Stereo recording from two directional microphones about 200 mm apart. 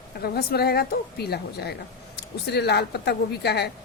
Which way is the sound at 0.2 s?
50° left (ahead or behind).